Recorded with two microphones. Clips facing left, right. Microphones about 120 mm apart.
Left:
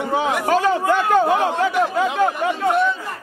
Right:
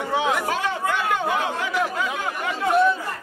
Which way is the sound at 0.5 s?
35° left (ahead or behind).